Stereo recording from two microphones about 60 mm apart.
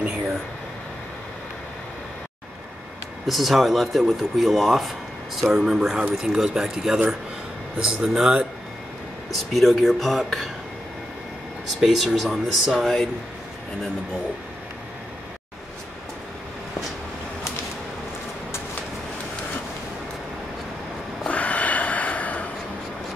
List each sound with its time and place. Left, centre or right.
3.3 s speech: centre
9.3 s speech: centre
11.8 s speech: centre
21.3 s snort: left